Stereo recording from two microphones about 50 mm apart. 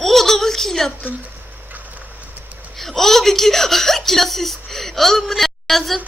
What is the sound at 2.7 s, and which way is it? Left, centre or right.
A woman's voice, centre.